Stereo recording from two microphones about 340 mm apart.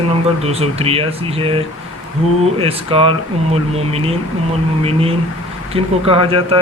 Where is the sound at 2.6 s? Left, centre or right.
Centre.